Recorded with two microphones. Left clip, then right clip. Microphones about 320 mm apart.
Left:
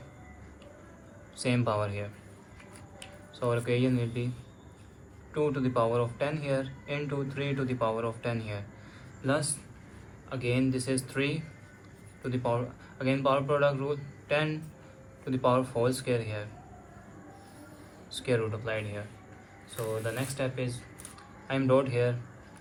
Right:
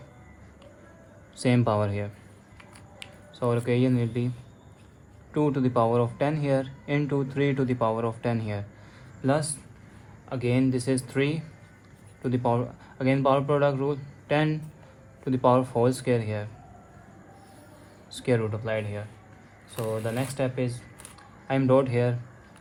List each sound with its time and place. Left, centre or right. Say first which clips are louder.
1.4 s speech: right 5 dB; right
5.3 s speech: right 4 dB; right
18.1 s speech: right 3 dB; right